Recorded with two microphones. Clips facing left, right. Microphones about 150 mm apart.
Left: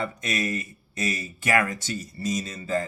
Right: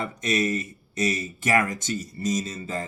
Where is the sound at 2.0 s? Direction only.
25° right (ahead or behind).